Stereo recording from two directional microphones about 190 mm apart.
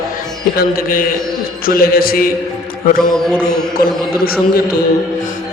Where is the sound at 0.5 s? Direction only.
50° left (ahead or behind).